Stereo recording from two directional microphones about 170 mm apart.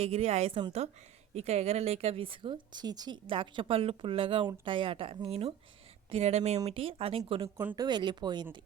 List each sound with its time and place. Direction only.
0.0 s a woman's voice: 35° right (ahead or behind)
7.4 s speech: 15° right (ahead or behind)
7.9 s speech: 25° right (ahead or behind)